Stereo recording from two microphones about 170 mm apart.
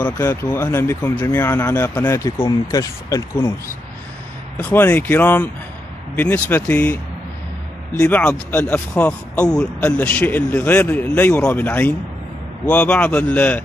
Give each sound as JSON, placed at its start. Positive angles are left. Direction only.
{"t": 0.0, "sound": "speech", "side_deg": 15}
{"t": 8.0, "sound": "speech", "side_deg": 10}